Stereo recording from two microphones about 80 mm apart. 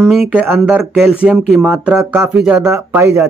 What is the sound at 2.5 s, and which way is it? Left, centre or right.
Speech, right.